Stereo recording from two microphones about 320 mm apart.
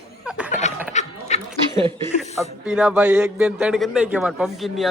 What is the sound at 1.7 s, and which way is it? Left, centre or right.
Speech, centre.